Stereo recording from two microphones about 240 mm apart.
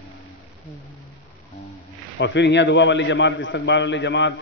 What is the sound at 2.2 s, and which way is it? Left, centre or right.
A man's voice, left.